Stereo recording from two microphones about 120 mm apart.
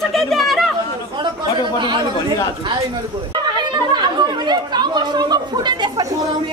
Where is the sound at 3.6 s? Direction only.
35° right (ahead or behind).